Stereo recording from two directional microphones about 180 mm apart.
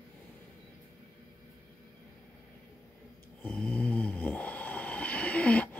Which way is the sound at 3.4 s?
5° left (ahead or behind).